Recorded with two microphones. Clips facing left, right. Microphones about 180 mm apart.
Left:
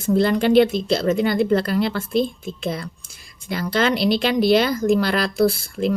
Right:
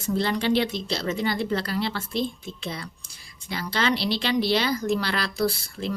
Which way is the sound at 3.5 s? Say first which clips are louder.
Left 5 dB; 50° left (ahead or behind).